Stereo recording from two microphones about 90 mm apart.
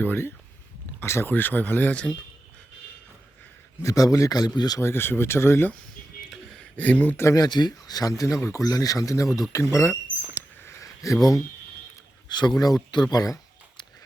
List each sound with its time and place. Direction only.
0.0 s speech: 25° left (ahead or behind)
3.8 s speech: 40° left (ahead or behind)
4.8 s speech: 25° left (ahead or behind)
6.3 s a sound: 5° left (ahead or behind)
6.7 s speech: 20° left (ahead or behind)
7.3 s speech: 45° left (ahead or behind)
8.4 s speech: 30° left (ahead or behind)
8.6 s speech: 40° left (ahead or behind)
9.6 s speech: 25° left (ahead or behind)
10.6 s a sound: 30° left (ahead or behind)
12.3 s speech: 55° left (ahead or behind)